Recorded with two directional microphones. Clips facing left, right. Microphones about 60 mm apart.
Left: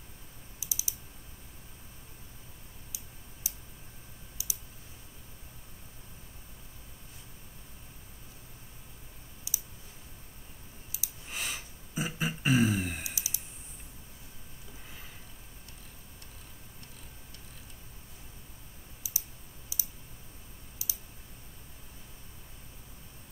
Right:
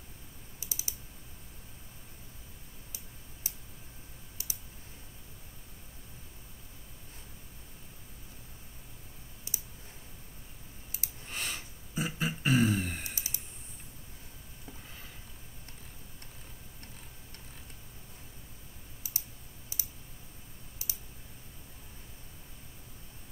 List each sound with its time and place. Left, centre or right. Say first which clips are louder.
0.6 s typing: left 1 dB; right
2.9 s clicking: left 1 dB; right
9.5 s clicking: left 1 dB; right
10.9 s clicking: even; right
11.2 s a sound: left 1 dB; centre
13.1 s clicking: left 1 dB; right
19.0 s clicking: left 1 dB; right